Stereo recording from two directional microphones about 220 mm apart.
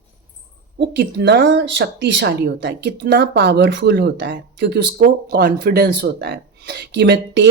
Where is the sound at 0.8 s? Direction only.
50° right (ahead or behind).